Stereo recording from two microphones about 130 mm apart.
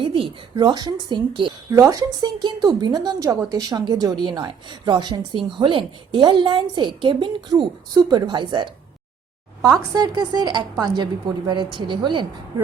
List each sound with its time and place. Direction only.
0.0 s speech: 40° right (ahead or behind)
9.6 s speech: 25° right (ahead or behind)